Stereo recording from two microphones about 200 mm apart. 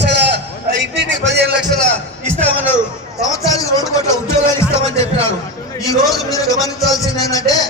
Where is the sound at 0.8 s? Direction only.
60° right (ahead or behind).